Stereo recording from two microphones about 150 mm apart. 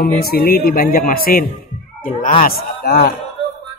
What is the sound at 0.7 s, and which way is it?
Speech, 70° left (ahead or behind).